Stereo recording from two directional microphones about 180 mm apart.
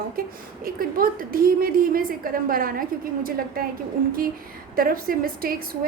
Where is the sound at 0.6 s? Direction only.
55° right (ahead or behind).